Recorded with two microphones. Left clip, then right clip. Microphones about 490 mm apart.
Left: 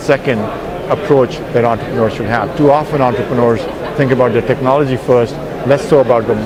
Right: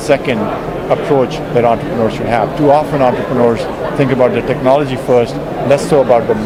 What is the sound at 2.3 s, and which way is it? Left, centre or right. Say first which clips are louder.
Speech: right 1 dB; left.